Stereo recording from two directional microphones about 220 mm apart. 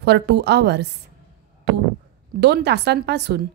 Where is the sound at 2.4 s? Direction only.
50° right (ahead or behind).